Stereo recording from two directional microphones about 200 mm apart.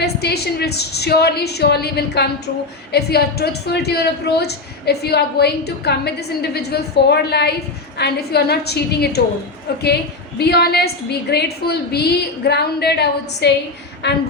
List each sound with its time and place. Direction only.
0.0 s a woman's voice: 55° left (ahead or behind)